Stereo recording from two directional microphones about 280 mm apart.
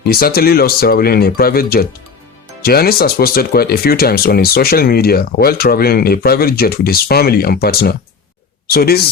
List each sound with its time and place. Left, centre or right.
0.0 s speech: left